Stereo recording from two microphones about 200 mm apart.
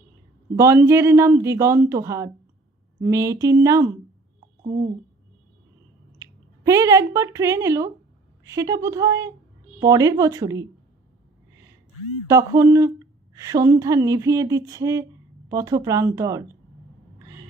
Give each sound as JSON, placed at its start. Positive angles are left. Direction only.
{"t": 0.5, "sound": "speech", "side_deg": -15}
{"t": 6.2, "sound": "a sound", "side_deg": -15}
{"t": 6.7, "sound": "speech", "side_deg": -15}
{"t": 12.3, "sound": "speech", "side_deg": -15}